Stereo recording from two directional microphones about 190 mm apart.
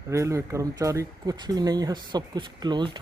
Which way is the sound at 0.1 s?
15° right (ahead or behind).